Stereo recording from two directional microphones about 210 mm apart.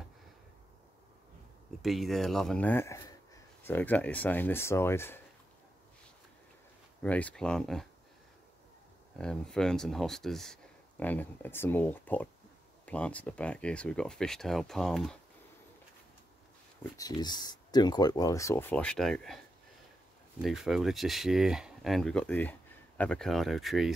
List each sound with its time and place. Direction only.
1.8 s speech: centre (ahead or behind)
7.0 s speech: 5° left (ahead or behind)
9.2 s speech: 5° left (ahead or behind)
16.9 s speech: 20° left (ahead or behind); by 19.4 s centre (ahead or behind)
20.4 s speech: centre (ahead or behind)